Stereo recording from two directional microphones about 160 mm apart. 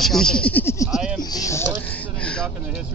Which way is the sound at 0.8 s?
Centre (ahead or behind).